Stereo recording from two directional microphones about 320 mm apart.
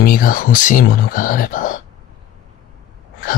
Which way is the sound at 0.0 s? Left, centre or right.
Left.